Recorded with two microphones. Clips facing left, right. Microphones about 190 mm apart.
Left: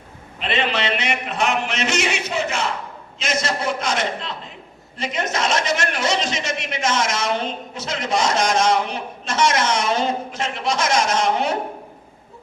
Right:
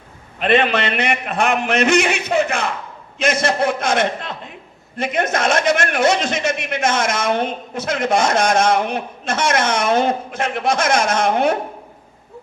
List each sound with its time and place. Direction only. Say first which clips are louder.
0.3 s a man's voice: right 7 dB; 55° right (ahead or behind)